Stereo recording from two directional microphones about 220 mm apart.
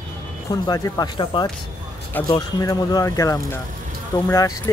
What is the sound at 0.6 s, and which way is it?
Speech, 20° left (ahead or behind).